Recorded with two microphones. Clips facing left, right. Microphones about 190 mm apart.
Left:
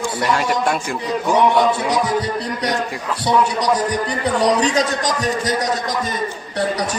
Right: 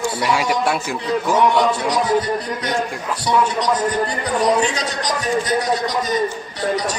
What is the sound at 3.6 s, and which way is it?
Speech, 15° left (ahead or behind).